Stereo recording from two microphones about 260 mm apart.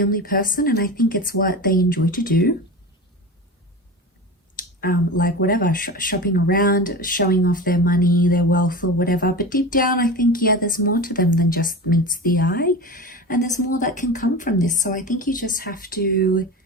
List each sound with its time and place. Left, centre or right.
0.0 s speech: left
4.5 s speech: left